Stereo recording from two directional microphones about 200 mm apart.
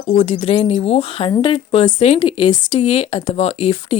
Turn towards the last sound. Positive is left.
turn(degrees=30)  # may be behind; listen again after turning